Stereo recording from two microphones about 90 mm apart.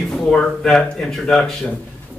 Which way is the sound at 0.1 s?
10° left (ahead or behind).